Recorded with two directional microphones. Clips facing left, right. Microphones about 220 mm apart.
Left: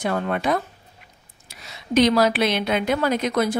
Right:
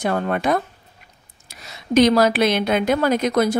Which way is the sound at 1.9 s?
45° right (ahead or behind).